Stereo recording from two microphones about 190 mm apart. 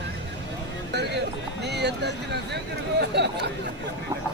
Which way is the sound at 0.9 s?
65° right (ahead or behind).